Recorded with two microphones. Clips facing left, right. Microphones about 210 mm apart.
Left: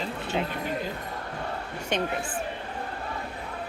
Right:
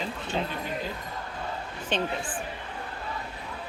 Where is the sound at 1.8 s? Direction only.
10° left (ahead or behind).